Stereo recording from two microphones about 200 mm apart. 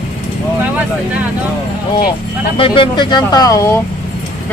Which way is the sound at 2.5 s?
25° left (ahead or behind).